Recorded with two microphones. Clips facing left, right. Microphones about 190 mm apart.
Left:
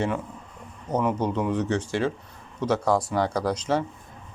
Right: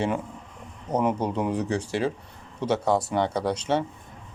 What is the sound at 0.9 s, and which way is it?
Speech, 30° right (ahead or behind).